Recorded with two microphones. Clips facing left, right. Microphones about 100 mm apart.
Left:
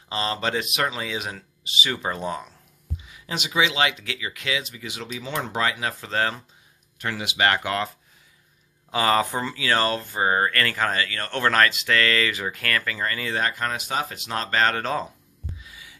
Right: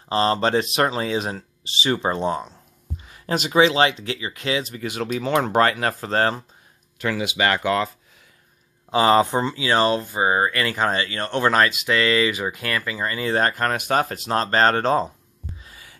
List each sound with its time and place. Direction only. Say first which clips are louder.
0.1 s speech: right 7 dB; 35° right (ahead or behind)
3.0 s speech: right 8 dB; 45° right (ahead or behind)
4.7 s speech: right 8 dB; 50° right (ahead or behind)
8.9 s speech: right 5 dB; 25° right (ahead or behind)
13.2 s speech: right 8 dB; 40° right (ahead or behind)
15.6 s a sound: right 1 dB; 45° right (ahead or behind)